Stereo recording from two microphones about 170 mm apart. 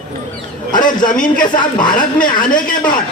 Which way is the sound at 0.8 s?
50° left (ahead or behind).